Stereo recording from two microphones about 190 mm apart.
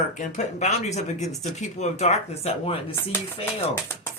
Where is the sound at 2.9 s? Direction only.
10° left (ahead or behind).